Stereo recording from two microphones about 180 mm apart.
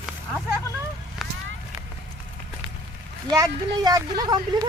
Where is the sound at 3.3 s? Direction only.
20° right (ahead or behind).